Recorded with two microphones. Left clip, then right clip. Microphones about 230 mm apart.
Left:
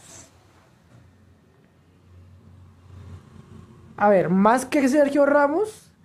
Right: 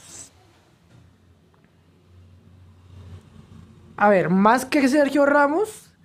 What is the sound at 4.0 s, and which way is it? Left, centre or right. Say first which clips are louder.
A woman's voice: right 1 dB; centre.